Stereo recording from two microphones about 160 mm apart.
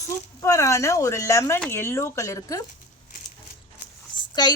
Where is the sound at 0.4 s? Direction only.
20° left (ahead or behind).